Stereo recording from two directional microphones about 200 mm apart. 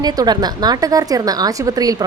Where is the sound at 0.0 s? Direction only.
20° right (ahead or behind).